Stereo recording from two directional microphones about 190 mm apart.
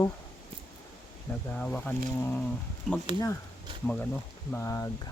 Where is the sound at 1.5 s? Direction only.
10° left (ahead or behind).